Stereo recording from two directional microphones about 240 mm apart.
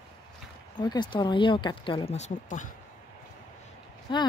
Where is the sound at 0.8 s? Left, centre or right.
Centre.